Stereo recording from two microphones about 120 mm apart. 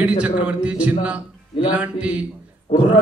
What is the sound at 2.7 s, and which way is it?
Speech, 55° left (ahead or behind).